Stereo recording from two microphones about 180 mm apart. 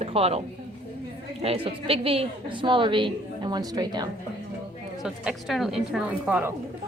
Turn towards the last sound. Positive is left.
turn(degrees=-10)  # may be behind; listen again after turning